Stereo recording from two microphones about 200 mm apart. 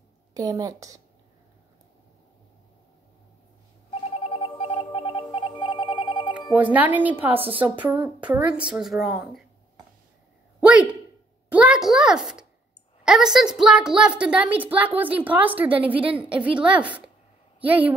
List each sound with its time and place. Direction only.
0.3 s a woman's voice: 15° right (ahead or behind)
3.9 s telephone: 30° left (ahead or behind)
6.5 s a woman's voice: 5° right (ahead or behind)
11.5 s a sound: 5° right (ahead or behind)
13.0 s a woman's voice: 5° right (ahead or behind)